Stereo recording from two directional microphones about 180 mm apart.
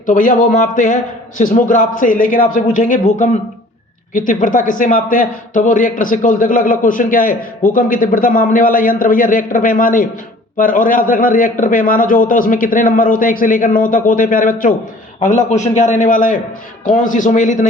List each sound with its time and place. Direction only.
0.0 s a man's voice: 45° left (ahead or behind)